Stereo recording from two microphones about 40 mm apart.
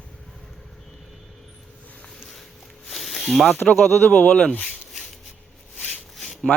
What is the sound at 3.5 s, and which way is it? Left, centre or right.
Speech, left.